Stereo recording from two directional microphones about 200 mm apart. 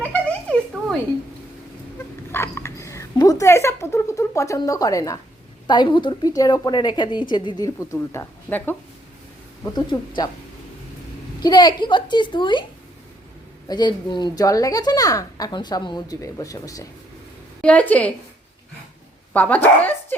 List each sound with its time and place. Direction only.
2.3 s a sound: 10° left (ahead or behind)
5.6 s a woman's voice: 20° left (ahead or behind)
11.4 s a woman's voice: 20° left (ahead or behind)
13.7 s a woman's voice: 20° left (ahead or behind)
17.6 s speech: 5° left (ahead or behind)
19.3 s speech: 10° left (ahead or behind)